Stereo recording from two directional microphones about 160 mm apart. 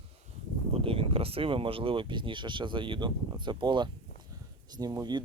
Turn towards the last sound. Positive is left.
turn(degrees=-25)  # may be behind; listen again after turning